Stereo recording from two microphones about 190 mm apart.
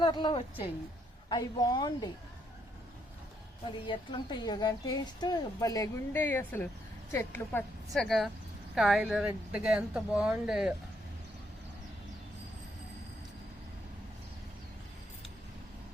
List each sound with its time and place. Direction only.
0.0 s speech: 25° left (ahead or behind)
3.7 s a woman's voice: 25° left (ahead or behind)
7.9 s speech: centre (ahead or behind)